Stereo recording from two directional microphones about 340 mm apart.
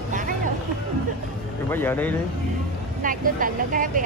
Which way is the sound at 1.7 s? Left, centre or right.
Centre.